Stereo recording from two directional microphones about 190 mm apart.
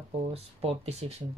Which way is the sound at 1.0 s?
30° right (ahead or behind).